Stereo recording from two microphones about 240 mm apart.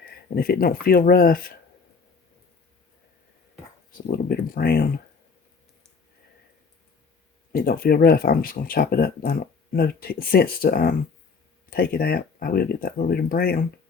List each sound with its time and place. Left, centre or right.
0.3 s speech: left
4.1 s speech: left
7.5 s speech: left